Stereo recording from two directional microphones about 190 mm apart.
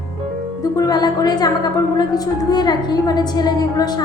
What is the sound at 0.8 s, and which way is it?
A woman's voice, 20° left (ahead or behind).